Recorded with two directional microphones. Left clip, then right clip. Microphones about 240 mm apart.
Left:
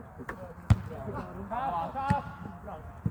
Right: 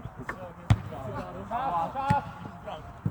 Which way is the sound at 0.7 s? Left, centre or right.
Centre.